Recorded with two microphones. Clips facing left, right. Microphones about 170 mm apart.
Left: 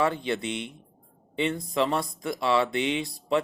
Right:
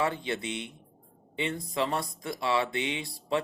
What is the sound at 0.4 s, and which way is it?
Speech, 20° left (ahead or behind).